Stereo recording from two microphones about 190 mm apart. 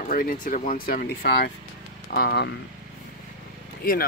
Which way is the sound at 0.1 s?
45° left (ahead or behind).